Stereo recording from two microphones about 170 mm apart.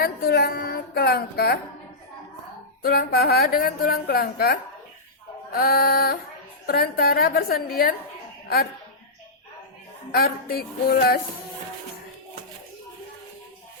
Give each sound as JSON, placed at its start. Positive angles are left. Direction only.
{"t": 0.0, "sound": "a woman's voice", "side_deg": 65}
{"t": 2.8, "sound": "a woman's voice", "side_deg": 65}
{"t": 10.1, "sound": "a woman's voice", "side_deg": 60}